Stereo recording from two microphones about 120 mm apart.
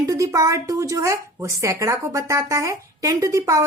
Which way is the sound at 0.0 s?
25° right (ahead or behind).